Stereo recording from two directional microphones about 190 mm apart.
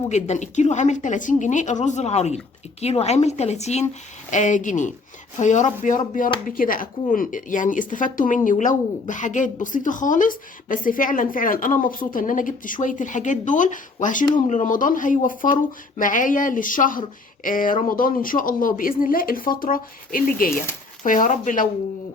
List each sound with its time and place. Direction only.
0.1 s a woman's voice: 40° left (ahead or behind)